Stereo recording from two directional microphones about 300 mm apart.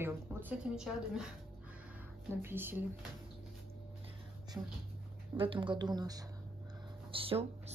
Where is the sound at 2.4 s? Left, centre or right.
Centre.